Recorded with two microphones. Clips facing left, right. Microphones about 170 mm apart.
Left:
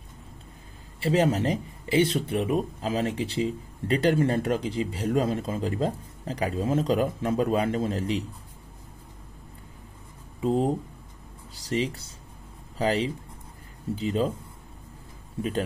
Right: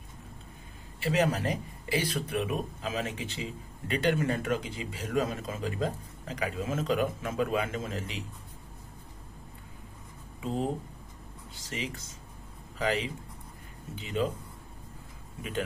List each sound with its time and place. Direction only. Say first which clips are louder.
1.0 s speech: left 5 dB; 30° left (ahead or behind)
10.4 s speech: left 7 dB; 35° left (ahead or behind)